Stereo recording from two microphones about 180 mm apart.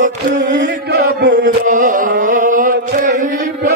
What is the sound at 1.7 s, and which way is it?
Chant, 45° right (ahead or behind).